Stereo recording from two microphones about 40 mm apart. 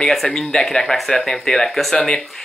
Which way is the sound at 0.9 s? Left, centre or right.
Centre.